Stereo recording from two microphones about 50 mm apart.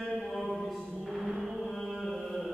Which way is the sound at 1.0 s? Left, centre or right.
Centre.